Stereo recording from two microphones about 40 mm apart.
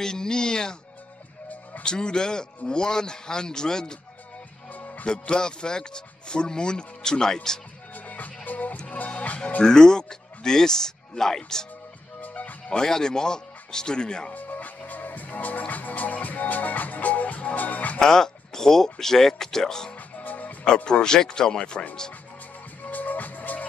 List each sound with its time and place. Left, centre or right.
0.0 s a man's voice: centre
1.9 s speech: centre
4.7 s music: left
5.0 s speech: left
7.9 s music: left
9.6 s a man's voice: centre
12.2 s music: left
12.6 s speech: centre
14.3 s music: left
18.0 s speech: centre
20.2 s music: left
20.6 s speech: left
22.8 s music: left